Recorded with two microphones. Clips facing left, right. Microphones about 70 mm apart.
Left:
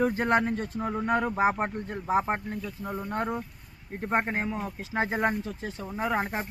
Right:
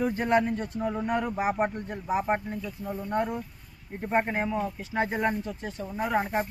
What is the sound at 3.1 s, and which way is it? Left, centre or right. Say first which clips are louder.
Speech: right 3 dB; left.